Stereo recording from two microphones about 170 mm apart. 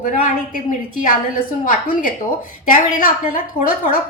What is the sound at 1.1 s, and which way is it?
A woman's voice, 55° left (ahead or behind).